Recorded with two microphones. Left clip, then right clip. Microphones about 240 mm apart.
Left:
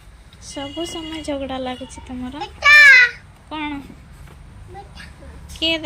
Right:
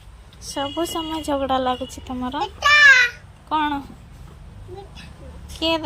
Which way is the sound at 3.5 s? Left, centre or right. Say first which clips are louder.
Right 6 dB; centre.